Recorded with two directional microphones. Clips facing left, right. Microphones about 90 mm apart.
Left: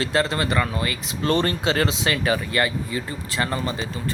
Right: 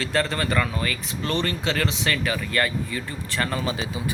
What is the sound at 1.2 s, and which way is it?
Speech, 40° left (ahead or behind).